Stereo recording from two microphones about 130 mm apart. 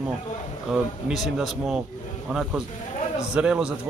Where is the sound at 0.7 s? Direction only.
Centre (ahead or behind).